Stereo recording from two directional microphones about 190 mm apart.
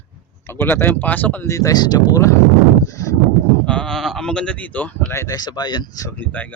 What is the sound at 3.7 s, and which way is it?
Speech, 5° left (ahead or behind).